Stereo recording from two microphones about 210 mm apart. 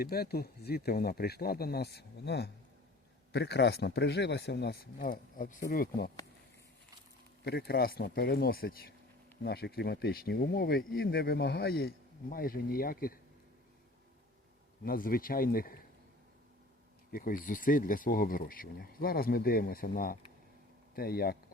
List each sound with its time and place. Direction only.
0.0 s speech: 45° left (ahead or behind)
7.4 s speech: 50° left (ahead or behind)
14.8 s speech: 45° left (ahead or behind)
17.1 s speech: 40° left (ahead or behind)